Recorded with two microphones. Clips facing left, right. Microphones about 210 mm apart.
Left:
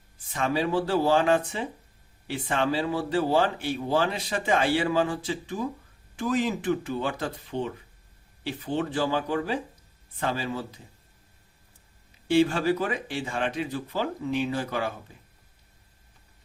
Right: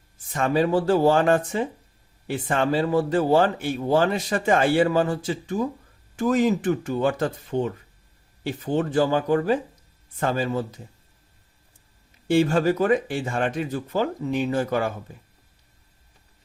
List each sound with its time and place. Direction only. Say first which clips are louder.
0.3 s speech: right 5 dB; 45° right (ahead or behind)
12.3 s speech: right 2 dB; 45° right (ahead or behind)